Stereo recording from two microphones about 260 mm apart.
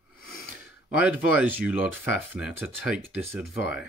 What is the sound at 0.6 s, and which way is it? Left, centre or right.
Speech, centre.